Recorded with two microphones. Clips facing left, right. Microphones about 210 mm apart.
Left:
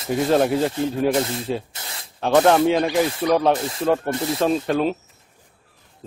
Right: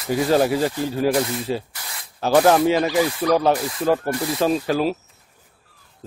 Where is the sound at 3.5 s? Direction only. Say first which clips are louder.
Even; 25° left (ahead or behind).